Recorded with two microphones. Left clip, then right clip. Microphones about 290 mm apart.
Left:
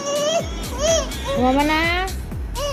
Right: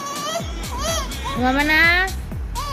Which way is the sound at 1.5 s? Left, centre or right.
Centre.